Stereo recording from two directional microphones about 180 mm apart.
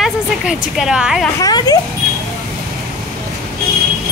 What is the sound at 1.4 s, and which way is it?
Speech, 20° left (ahead or behind).